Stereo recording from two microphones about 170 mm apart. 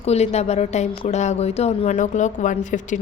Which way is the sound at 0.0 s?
40° left (ahead or behind).